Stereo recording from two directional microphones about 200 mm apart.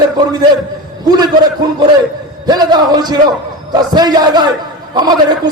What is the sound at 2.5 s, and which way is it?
A man's voice, 20° right (ahead or behind).